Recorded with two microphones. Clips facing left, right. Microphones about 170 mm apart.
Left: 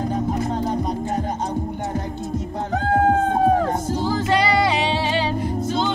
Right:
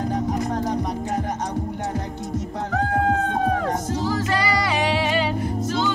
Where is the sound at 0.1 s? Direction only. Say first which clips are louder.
Left 1 dB; 25° left (ahead or behind).